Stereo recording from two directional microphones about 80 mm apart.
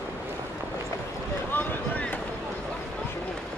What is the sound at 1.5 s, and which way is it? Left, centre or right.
Boat, centre.